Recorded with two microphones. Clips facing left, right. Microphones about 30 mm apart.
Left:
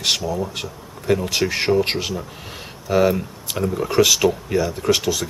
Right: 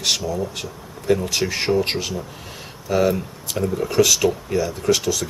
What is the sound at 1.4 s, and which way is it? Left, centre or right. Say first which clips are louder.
Speech: left 2 dB; centre.